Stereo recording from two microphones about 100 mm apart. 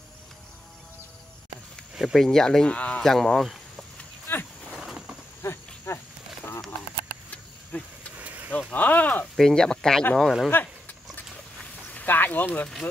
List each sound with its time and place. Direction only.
2.0 s speech: centre (ahead or behind)
4.3 s wild animals: 20° left (ahead or behind)
4.7 s a sound: 5° right (ahead or behind)
5.4 s cricket: 25° left (ahead or behind)
7.7 s speech: 15° left (ahead or behind)
8.2 s vehicle: 15° right (ahead or behind)
8.5 s speech: 15° left (ahead or behind)
9.4 s speech: 5° left (ahead or behind)
10.5 s a sound: 20° left (ahead or behind)